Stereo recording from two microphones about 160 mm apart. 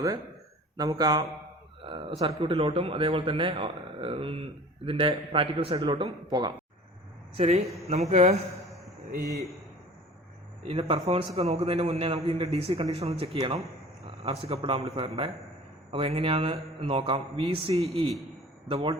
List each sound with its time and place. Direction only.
0.8 s speech: 25° right (ahead or behind)
1.8 s a man's voice: 35° right (ahead or behind)
7.3 s a man's voice: 40° right (ahead or behind)
10.7 s a man's voice: 35° right (ahead or behind)